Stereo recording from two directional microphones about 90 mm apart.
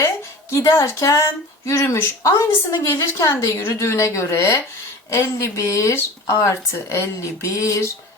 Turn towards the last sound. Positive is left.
turn(degrees=35)  # may be behind; listen again after turning